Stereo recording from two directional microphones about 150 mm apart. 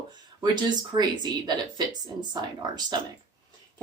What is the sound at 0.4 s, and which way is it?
Speech, 30° right (ahead or behind).